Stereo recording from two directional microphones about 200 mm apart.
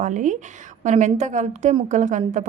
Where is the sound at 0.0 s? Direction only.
40° right (ahead or behind).